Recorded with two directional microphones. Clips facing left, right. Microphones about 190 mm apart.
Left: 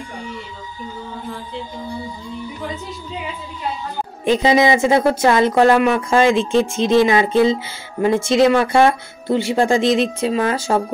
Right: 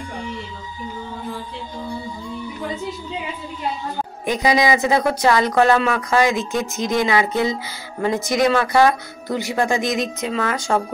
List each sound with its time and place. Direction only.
4.2 s speech: 25° left (ahead or behind)
5.9 s speech: 25° left (ahead or behind)